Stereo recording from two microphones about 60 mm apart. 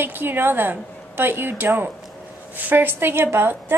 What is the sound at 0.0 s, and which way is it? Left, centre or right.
A woman's voice, right.